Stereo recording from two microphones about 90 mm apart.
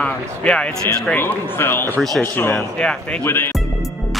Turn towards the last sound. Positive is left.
turn(degrees=25)  # may be behind; listen again after turning